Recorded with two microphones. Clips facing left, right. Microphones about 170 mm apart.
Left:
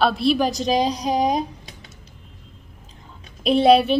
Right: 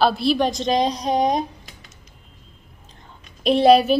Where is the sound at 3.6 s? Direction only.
Centre (ahead or behind).